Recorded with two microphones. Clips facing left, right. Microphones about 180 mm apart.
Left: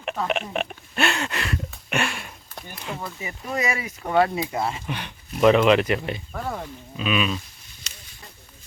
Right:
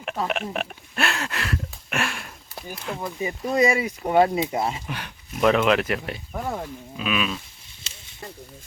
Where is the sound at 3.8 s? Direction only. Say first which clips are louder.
Right 2 dB; 20° right (ahead or behind).